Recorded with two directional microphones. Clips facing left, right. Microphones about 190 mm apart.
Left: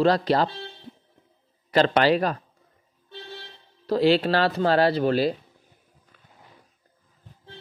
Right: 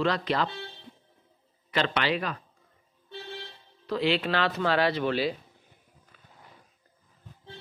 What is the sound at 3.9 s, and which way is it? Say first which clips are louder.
A man's voice: left 7 dB; 40° left (ahead or behind).